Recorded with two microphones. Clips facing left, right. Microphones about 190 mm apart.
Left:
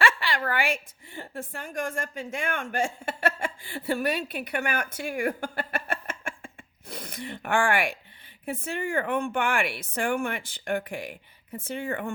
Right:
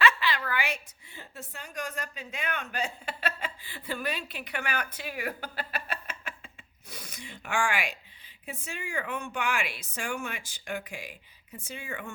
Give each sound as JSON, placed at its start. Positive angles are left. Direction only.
{"t": 0.0, "sound": "a woman's voice", "side_deg": 45}
{"t": 5.0, "sound": "a sound", "side_deg": 50}
{"t": 8.4, "sound": "speech", "side_deg": 55}